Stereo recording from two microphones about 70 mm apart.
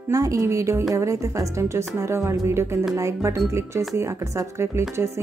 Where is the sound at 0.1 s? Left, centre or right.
Right.